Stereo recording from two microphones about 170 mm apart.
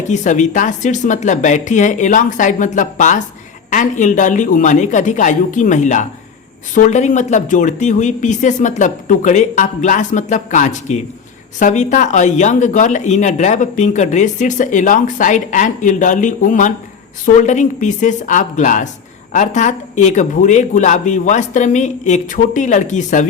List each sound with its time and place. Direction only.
0.1 s speech: 45° left (ahead or behind)